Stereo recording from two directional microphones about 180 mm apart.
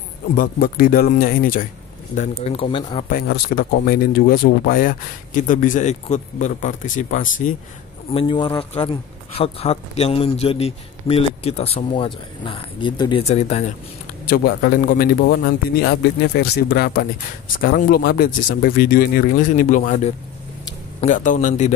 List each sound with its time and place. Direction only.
0.4 s speech: 50° left (ahead or behind)
2.1 s speech: 35° left (ahead or behind)
3.1 s speech: 55° left (ahead or behind)
8.1 s speech: 30° left (ahead or behind)
13.2 s speech: 35° left (ahead or behind)
14.2 s a man's voice: 55° left (ahead or behind)
21.0 s speech: 45° left (ahead or behind)